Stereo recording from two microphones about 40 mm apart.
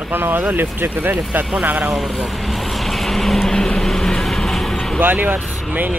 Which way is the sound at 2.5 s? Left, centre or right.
Centre.